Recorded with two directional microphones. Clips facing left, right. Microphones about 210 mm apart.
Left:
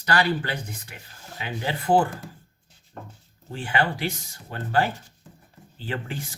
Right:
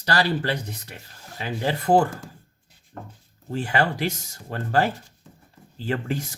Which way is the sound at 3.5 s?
40° right (ahead or behind).